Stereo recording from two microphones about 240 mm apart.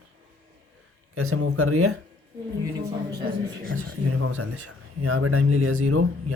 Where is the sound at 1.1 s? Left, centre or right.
Right.